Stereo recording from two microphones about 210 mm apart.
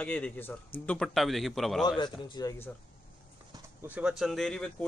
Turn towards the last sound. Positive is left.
turn(degrees=5)  # may be behind; listen again after turning